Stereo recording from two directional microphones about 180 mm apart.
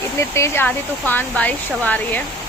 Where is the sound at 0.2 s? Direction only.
15° left (ahead or behind).